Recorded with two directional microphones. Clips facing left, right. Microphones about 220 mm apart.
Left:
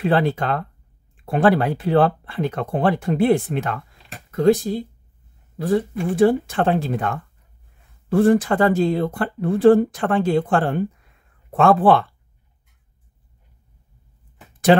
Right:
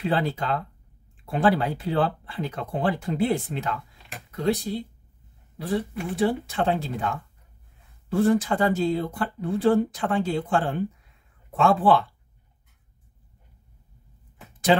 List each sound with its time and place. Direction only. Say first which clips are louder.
0.0 s speech: left 6 dB; 60° left (ahead or behind)
14.7 s speech: left 6 dB; 65° left (ahead or behind)